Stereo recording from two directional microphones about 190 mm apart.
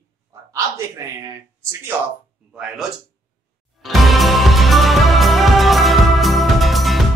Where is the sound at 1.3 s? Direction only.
15° right (ahead or behind).